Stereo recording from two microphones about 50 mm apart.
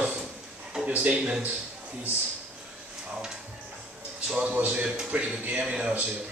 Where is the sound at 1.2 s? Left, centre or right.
Centre.